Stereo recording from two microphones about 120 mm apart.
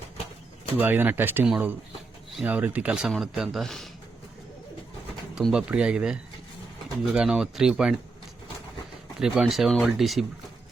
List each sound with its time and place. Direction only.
0.8 s speech: 15° right (ahead or behind); by 3.8 s 5° left (ahead or behind)
5.3 s speech: 5° right (ahead or behind)
9.2 s speech: 5° right (ahead or behind)